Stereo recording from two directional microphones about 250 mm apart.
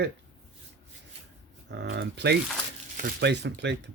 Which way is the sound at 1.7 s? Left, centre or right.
Right.